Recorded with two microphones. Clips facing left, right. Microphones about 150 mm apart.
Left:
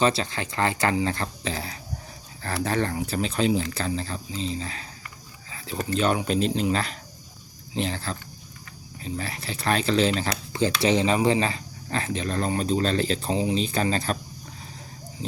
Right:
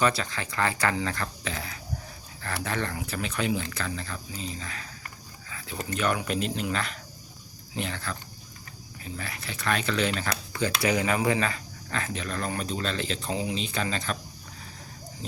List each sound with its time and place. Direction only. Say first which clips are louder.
0.0 s speech: left 3 dB; 30° left (ahead or behind)
5.5 s a sound: left 2 dB; 30° left (ahead or behind)
5.9 s speech: left 4 dB; 30° left (ahead or behind)